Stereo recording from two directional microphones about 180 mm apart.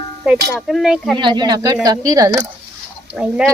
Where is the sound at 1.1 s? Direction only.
25° right (ahead or behind).